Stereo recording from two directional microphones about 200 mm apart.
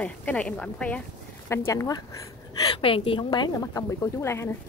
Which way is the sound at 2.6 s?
25° left (ahead or behind).